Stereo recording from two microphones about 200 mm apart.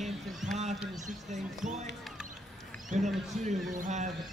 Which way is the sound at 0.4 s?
5° right (ahead or behind).